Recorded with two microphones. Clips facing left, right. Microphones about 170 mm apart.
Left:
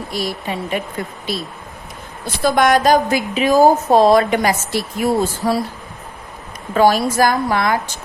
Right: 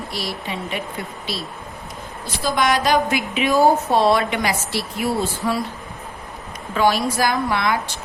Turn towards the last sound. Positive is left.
turn(degrees=45)  # may be behind; listen again after turning